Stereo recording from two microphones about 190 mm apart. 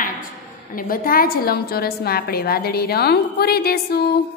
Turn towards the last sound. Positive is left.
turn(degrees=55)  # may be behind; listen again after turning